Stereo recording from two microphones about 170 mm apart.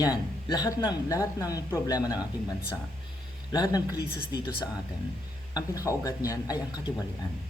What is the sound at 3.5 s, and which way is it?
Speech, 25° left (ahead or behind).